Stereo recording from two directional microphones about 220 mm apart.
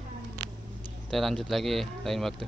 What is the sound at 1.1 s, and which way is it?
Speech, centre (ahead or behind).